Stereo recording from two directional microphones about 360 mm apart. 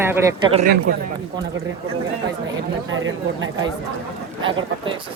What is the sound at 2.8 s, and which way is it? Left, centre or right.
Speech, right.